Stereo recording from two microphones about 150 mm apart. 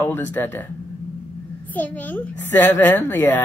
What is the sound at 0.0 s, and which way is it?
Speech, 10° left (ahead or behind).